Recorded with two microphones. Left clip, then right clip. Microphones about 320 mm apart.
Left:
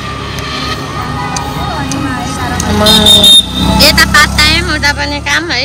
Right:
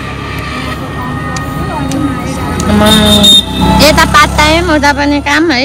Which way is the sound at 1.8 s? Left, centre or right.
Right.